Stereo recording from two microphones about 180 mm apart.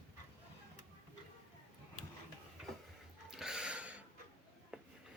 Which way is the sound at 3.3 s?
5° right (ahead or behind).